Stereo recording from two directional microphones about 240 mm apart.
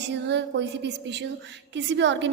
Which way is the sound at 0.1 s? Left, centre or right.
Right.